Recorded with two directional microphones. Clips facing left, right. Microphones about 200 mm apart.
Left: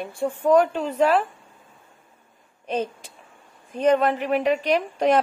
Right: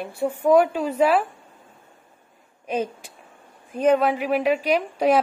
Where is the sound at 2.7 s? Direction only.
10° right (ahead or behind).